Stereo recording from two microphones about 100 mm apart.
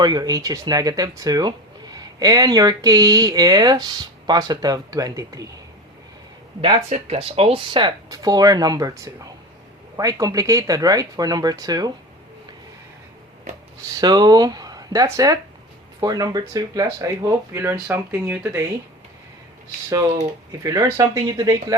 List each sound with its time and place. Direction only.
0.0 s speech: 40° right (ahead or behind)
6.6 s speech: 75° right (ahead or behind); by 8.9 s 40° right (ahead or behind)
10.0 s speech: 35° right (ahead or behind)
14.0 s speech: 45° right (ahead or behind); by 18.7 s 25° right (ahead or behind)
20.6 s speech: 35° right (ahead or behind)